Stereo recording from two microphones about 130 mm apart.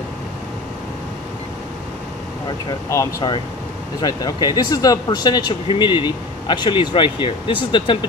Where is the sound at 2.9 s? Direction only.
25° left (ahead or behind).